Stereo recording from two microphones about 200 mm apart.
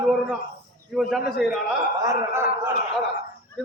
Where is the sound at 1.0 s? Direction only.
Centre (ahead or behind).